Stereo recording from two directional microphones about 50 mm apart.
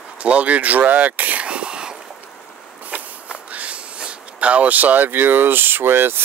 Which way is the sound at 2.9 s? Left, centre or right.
Right.